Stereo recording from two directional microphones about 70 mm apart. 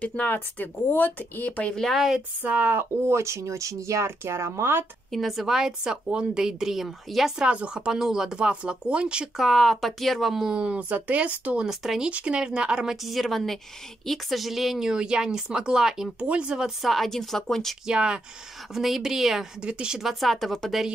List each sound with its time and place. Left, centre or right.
0.0 s speech: centre
1.8 s speech: centre
2.4 s speech: right
3.1 s speech: right
5.1 s speech: centre
7.4 s speech: centre
9.4 s speech: centre
11.6 s speech: centre
12.1 s speech: centre
17.8 s speech: centre
20.0 s speech: centre